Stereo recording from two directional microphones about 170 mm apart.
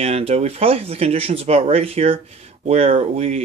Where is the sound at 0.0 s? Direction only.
35° right (ahead or behind).